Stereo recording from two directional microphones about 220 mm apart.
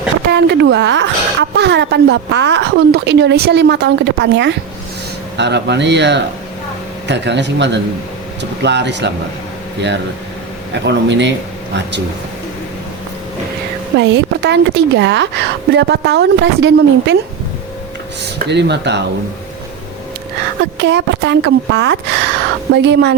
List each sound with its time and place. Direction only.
0.3 s a woman's voice: 50° right (ahead or behind)
10.8 s a woman's voice: 50° right (ahead or behind)
14.0 s a woman's voice: 50° right (ahead or behind)
18.2 s a woman's voice: 50° right (ahead or behind)
20.7 s a woman's voice: 55° right (ahead or behind)